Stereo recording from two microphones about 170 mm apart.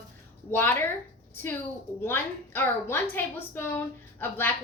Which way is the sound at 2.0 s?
15° left (ahead or behind).